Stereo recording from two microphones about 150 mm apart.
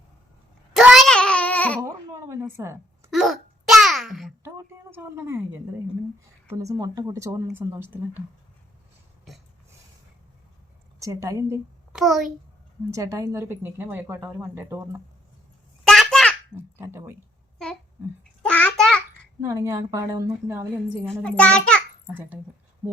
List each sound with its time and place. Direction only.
0.8 s a sound: centre (ahead or behind)
1.8 s a sound: 20° right (ahead or behind)
3.1 s babbling: centre (ahead or behind)
4.5 s a woman's voice: 15° right (ahead or behind)
6.5 s speech: 20° right (ahead or behind)
11.0 s speech: 20° right (ahead or behind)
11.9 s a child's voice: 5° right (ahead or behind)
12.9 s a woman's voice: 20° right (ahead or behind)
15.8 s a sound: centre (ahead or behind)
16.7 s a woman's voice: 15° right (ahead or behind)
18.2 s a sound: 10° left (ahead or behind)
19.4 s speech: 20° right (ahead or behind)
21.1 s a child's voice: 5° left (ahead or behind)
22.0 s a child's voice: 15° right (ahead or behind)